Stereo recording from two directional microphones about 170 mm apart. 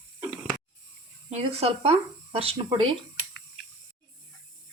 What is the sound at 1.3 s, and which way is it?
Speech, 35° right (ahead or behind).